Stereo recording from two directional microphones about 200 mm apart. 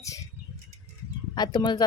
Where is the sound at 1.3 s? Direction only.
20° left (ahead or behind).